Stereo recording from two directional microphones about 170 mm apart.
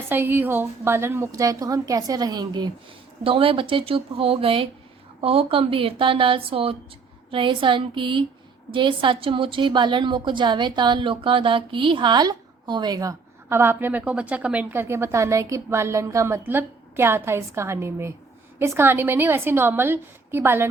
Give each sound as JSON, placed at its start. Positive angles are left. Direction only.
{"t": 0.1, "sound": "a woman's voice", "side_deg": -10}